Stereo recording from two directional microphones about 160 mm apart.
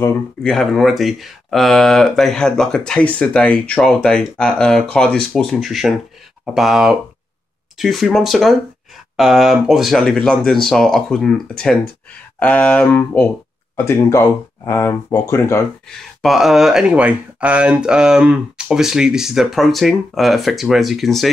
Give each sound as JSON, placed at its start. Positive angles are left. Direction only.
{"t": 0.4, "sound": "speech", "side_deg": 0}
{"t": 15.9, "sound": "speech", "side_deg": 0}